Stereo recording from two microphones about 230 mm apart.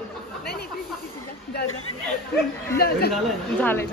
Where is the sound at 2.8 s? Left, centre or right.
Left.